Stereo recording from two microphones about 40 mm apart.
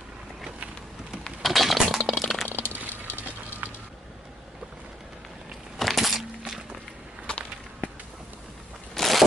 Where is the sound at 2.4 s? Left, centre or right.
Left.